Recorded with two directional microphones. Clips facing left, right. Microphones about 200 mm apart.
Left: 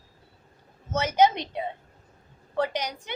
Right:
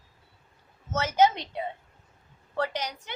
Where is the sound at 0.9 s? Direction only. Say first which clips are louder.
Left 1 dB; 15° left (ahead or behind).